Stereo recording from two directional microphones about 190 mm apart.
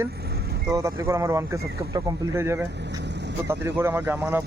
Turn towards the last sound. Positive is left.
turn(degrees=-10)  # may be behind; listen again after turning